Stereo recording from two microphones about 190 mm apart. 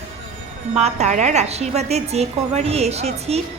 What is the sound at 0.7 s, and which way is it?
A woman's voice, 35° right (ahead or behind).